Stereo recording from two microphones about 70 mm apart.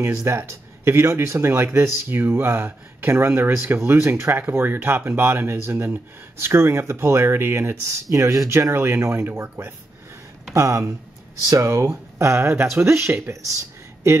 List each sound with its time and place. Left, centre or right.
0.0 s speech: right
8.5 s speech: right
10.5 s speech: right